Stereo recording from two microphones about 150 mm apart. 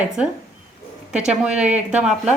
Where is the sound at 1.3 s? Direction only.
5° right (ahead or behind).